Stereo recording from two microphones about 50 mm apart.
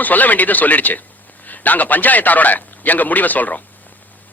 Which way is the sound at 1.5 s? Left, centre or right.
Left.